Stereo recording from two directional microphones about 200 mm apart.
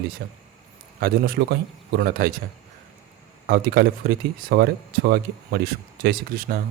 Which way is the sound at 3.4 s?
50° right (ahead or behind).